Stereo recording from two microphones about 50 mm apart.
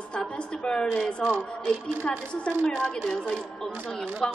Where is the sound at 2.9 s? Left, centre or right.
Centre.